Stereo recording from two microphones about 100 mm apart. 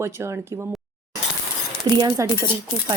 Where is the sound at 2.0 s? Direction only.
40° right (ahead or behind).